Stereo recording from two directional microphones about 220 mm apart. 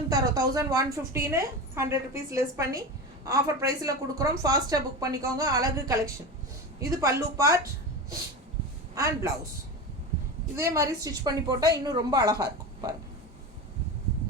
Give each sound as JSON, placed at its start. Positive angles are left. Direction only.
{"t": 0.1, "sound": "a woman's voice", "side_deg": -15}
{"t": 9.0, "sound": "a woman's voice", "side_deg": -15}
{"t": 10.5, "sound": "a woman's voice", "side_deg": -15}